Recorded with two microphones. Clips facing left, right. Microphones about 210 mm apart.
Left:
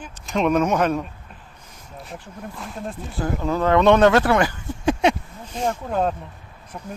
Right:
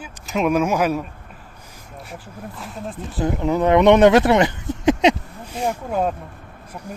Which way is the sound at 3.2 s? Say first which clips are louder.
Right 3 dB; 20° right (ahead or behind).